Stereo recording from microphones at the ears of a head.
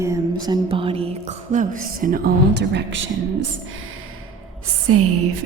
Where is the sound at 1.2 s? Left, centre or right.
Right.